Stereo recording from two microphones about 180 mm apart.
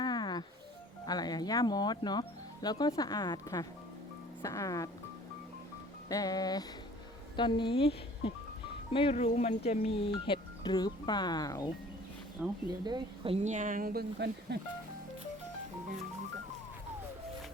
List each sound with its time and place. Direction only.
0.0 s a sound: 25° left (ahead or behind)
1.0 s speech: 20° left (ahead or behind)
6.1 s speech: 20° left (ahead or behind)
12.4 s speech: 5° right (ahead or behind)
12.8 s speech: 25° right (ahead or behind); by 14.6 s 65° right (ahead or behind)